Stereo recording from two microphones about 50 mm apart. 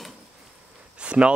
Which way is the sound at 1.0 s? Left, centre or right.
Right.